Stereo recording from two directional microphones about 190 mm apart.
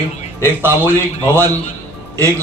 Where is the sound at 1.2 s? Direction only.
15° right (ahead or behind).